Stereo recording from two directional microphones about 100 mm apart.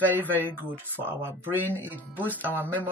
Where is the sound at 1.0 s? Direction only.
20° right (ahead or behind).